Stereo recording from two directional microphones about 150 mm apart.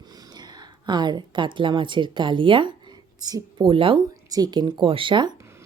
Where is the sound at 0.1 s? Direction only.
25° right (ahead or behind).